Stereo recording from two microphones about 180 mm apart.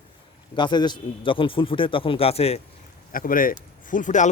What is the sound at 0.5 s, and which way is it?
A man's voice, 25° left (ahead or behind).